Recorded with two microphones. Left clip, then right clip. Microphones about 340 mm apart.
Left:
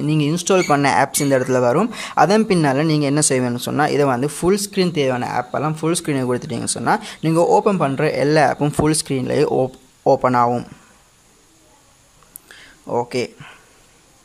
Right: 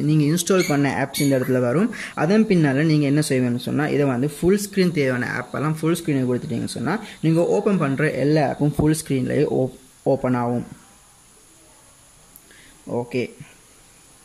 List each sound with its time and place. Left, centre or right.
0.0 s speech: centre
0.9 s speech: left
1.6 s speech: centre
8.2 s speech: left
8.9 s speech: centre
9.5 s speech: left
12.9 s speech: left